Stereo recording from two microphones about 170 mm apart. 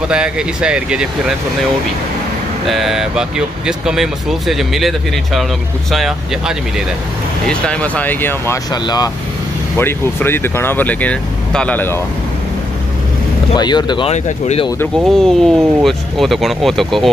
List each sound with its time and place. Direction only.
0.1 s speech: 5° right (ahead or behind)
2.7 s speech: centre (ahead or behind)
8.8 s speech: 25° left (ahead or behind)
9.8 s speech: 15° left (ahead or behind)
13.6 s speech: 25° left (ahead or behind)
14.1 s speech: 40° left (ahead or behind)
15.0 s speech: centre (ahead or behind)